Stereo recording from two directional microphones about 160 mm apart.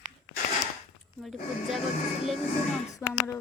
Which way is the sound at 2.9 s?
20° left (ahead or behind).